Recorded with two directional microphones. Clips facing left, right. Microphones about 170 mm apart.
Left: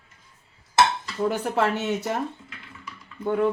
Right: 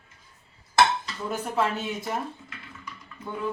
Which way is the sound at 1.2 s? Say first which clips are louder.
Left 4 dB; 70° left (ahead or behind).